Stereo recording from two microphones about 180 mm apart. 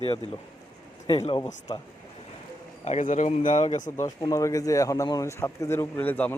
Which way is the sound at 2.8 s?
40° left (ahead or behind).